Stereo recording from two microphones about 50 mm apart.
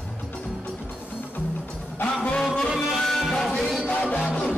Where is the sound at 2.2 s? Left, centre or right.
Left.